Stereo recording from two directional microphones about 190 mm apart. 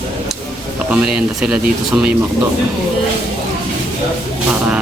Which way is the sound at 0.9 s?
5° right (ahead or behind).